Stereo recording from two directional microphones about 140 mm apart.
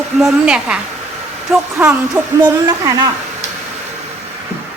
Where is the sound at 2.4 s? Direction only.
25° right (ahead or behind).